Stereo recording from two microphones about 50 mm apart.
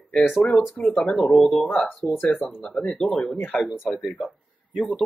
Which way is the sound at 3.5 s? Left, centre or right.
Centre.